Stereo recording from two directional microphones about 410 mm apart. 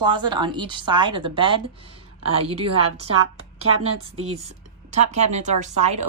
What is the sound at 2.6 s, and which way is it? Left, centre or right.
Speech, centre.